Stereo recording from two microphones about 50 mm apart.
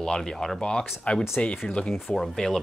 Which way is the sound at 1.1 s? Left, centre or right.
Left.